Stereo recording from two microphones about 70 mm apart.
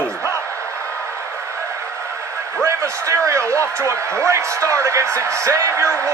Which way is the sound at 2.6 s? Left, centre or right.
Right.